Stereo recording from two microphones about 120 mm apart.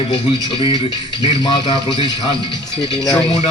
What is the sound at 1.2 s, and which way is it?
A man's voice, 40° left (ahead or behind).